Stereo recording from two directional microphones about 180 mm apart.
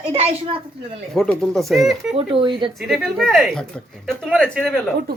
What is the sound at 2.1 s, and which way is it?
Speech, 30° right (ahead or behind).